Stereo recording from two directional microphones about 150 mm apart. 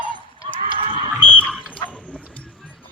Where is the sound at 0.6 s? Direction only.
35° right (ahead or behind).